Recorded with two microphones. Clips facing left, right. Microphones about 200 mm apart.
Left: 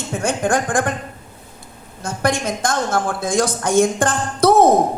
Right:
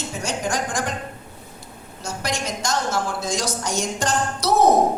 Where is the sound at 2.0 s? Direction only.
55° left (ahead or behind).